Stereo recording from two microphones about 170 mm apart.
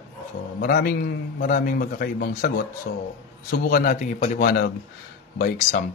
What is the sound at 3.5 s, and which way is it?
Speech, 60° left (ahead or behind).